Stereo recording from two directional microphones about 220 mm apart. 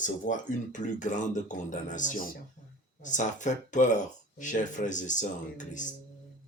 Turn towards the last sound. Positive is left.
turn(degrees=35)  # may be behind; listen again after turning